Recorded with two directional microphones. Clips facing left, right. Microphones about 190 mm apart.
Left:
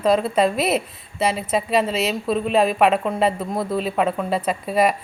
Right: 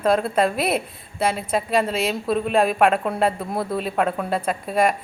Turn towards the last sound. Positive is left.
turn(degrees=0)  # may be behind; listen again after turning